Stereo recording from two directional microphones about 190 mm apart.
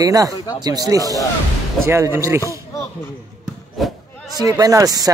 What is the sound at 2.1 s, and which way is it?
Speech, 15° right (ahead or behind).